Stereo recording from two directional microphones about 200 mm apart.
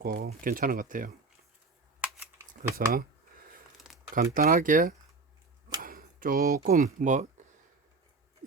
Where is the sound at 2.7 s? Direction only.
50° right (ahead or behind).